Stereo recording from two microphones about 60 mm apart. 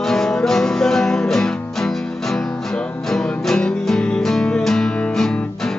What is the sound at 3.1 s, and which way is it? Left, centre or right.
Music, centre.